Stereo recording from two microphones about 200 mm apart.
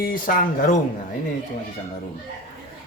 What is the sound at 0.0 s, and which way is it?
Speech, 45° left (ahead or behind).